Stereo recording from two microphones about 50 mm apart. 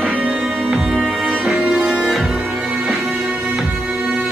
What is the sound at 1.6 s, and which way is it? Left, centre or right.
Music, right.